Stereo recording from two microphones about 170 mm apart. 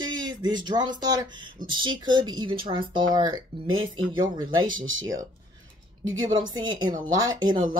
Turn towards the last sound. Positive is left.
turn(degrees=-25)  # may be behind; listen again after turning